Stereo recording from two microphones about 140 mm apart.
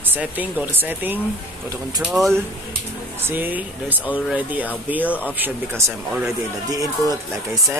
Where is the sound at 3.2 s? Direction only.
15° right (ahead or behind).